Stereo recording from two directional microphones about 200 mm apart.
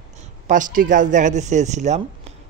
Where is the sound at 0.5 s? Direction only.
40° right (ahead or behind).